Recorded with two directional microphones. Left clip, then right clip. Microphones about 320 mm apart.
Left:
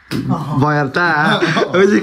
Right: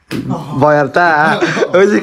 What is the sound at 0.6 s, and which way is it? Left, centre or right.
Speech, centre.